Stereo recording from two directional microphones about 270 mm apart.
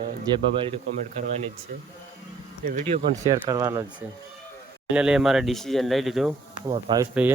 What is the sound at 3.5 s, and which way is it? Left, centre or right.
Speech, centre.